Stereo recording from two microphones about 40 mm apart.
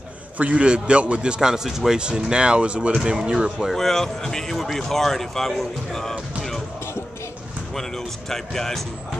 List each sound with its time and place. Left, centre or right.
0.4 s a man's voice: right
1.5 s speech: centre
2.0 s speech: right
3.7 s a man's voice: centre
8.3 s a man's voice: centre